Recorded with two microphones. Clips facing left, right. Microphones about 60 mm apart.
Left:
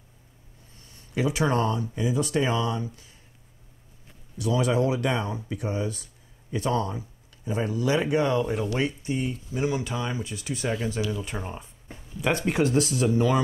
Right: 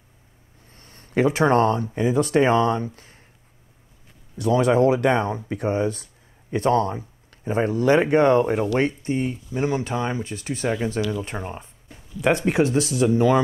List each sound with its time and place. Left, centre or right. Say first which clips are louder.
0.7 s speech: right 7 dB; right
4.4 s speech: right 6 dB; right
12.3 s speech: right 4 dB; right